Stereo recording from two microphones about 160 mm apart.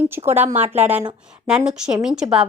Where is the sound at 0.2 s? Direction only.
30° right (ahead or behind).